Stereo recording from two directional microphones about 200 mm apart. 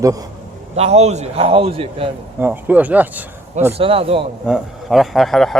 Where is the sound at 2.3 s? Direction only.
10° right (ahead or behind).